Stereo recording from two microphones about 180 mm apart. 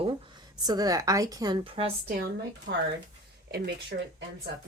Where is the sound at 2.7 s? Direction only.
55° right (ahead or behind).